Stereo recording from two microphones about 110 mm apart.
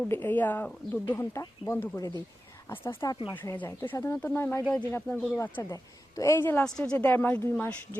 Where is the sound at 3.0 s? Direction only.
35° left (ahead or behind).